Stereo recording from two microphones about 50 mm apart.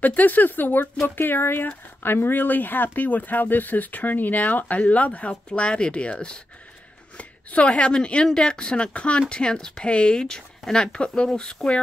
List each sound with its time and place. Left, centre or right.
0.0 s speech: left; by 11.8 s centre